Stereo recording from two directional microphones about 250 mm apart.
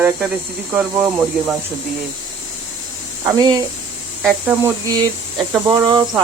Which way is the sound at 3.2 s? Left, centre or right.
Centre.